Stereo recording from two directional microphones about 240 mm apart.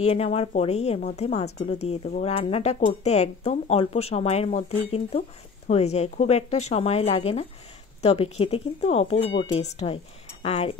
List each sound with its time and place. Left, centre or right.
0.0 s speech: left